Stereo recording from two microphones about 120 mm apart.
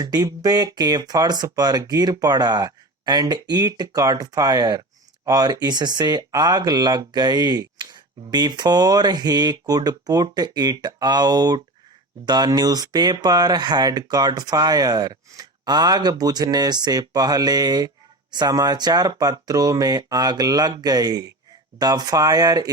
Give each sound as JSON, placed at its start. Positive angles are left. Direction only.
{"t": 0.0, "sound": "speech", "side_deg": -30}